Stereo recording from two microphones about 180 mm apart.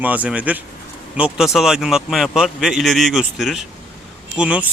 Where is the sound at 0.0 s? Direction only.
10° right (ahead or behind).